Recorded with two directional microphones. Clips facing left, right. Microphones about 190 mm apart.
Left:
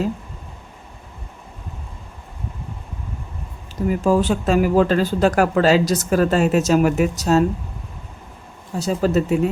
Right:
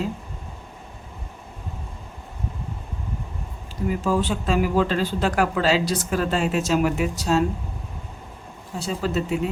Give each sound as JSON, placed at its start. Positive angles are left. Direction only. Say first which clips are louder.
{"t": 3.8, "sound": "speech", "louder": "left 5 dB", "side_deg": 45}
{"t": 8.8, "sound": "speech", "louder": "left 6 dB", "side_deg": 45}